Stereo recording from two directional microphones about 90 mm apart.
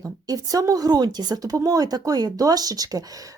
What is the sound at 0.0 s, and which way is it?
A woman's voice, 40° right (ahead or behind).